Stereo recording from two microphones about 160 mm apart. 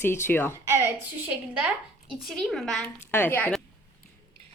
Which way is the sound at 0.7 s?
15° right (ahead or behind).